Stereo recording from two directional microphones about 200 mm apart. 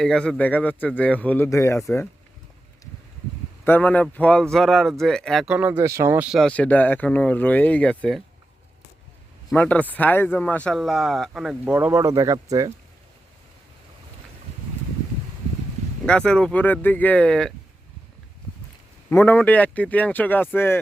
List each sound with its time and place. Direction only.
0.0 s a man's voice: 5° left (ahead or behind)
3.6 s a man's voice: 10° left (ahead or behind)
9.5 s a man's voice: 5° left (ahead or behind); by 12.7 s 15° right (ahead or behind)
16.0 s speech: 5° left (ahead or behind)
19.1 s a man's voice: 10° left (ahead or behind)